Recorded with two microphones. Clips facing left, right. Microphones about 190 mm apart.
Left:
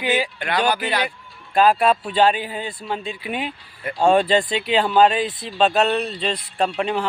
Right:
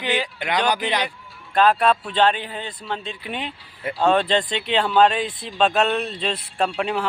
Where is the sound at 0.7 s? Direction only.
15° right (ahead or behind).